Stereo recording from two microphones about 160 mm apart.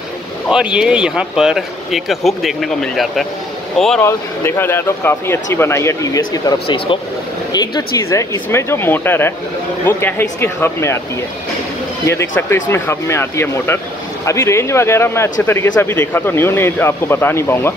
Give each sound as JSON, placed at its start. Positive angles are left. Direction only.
{"t": 0.5, "sound": "speech", "side_deg": -5}
{"t": 4.0, "sound": "speech", "side_deg": 15}
{"t": 12.1, "sound": "speech", "side_deg": 15}